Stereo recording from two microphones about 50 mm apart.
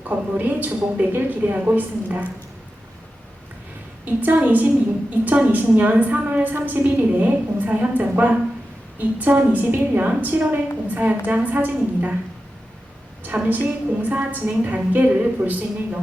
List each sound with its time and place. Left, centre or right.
0.1 s a woman's voice: right
4.0 s a woman's voice: right
13.2 s a woman's voice: right